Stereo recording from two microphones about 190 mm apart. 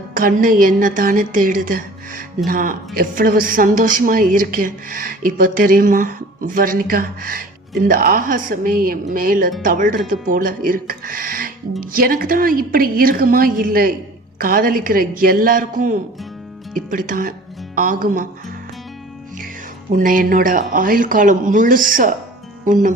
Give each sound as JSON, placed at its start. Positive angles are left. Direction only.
{"t": 0.2, "sound": "a woman's voice", "side_deg": -45}
{"t": 19.9, "sound": "a woman's voice", "side_deg": -45}